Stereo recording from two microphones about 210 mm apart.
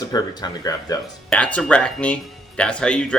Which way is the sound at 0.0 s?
20° left (ahead or behind).